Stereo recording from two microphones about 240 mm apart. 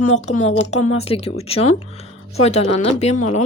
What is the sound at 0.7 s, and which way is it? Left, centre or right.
Speech, left.